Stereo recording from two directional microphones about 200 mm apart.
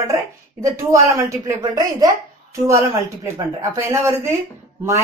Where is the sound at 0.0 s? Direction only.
15° right (ahead or behind).